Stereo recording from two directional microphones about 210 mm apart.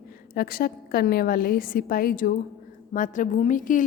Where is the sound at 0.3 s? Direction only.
45° left (ahead or behind).